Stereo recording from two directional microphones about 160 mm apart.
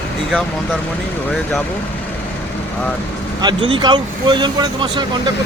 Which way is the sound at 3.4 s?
30° right (ahead or behind).